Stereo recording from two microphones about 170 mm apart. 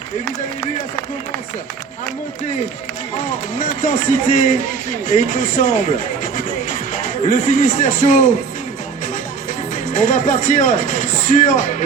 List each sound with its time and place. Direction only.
3.6 s speech: 50° left (ahead or behind)
9.7 s speech: 50° left (ahead or behind)